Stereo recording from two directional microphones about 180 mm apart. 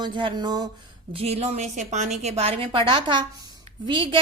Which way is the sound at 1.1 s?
35° right (ahead or behind).